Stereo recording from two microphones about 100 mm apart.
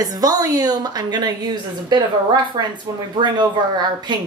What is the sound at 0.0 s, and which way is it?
A woman's voice, 40° right (ahead or behind).